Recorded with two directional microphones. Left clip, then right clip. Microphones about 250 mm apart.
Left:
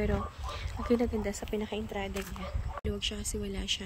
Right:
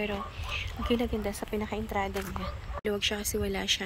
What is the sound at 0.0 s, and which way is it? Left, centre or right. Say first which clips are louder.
Speech: even; left.